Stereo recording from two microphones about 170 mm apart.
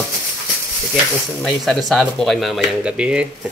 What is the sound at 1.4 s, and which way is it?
Speech, centre (ahead or behind).